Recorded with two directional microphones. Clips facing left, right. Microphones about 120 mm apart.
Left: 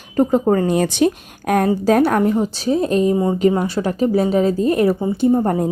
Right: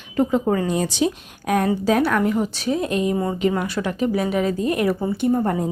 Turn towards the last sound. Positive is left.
turn(degrees=25)  # may be behind; listen again after turning